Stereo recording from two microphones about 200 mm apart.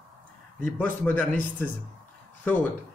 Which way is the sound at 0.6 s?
10° left (ahead or behind).